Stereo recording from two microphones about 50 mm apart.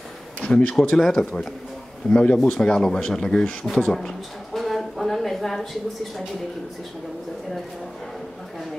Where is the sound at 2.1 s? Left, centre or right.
Left.